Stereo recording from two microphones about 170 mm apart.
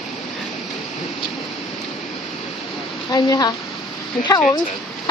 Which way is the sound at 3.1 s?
25° left (ahead or behind).